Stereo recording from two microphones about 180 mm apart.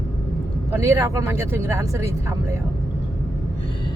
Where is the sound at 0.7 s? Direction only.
15° right (ahead or behind).